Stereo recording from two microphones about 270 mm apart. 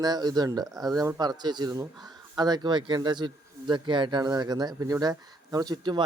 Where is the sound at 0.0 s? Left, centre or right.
Centre.